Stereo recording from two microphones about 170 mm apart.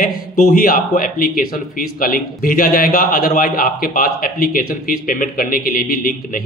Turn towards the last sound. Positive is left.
turn(degrees=60)  # may be behind; listen again after turning